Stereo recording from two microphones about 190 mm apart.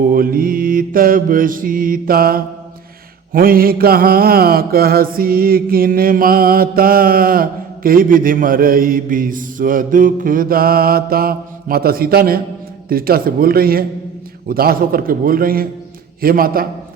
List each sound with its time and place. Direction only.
0.0 s mantra: 50° right (ahead or behind)